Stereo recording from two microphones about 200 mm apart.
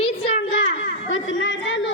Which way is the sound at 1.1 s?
70° left (ahead or behind).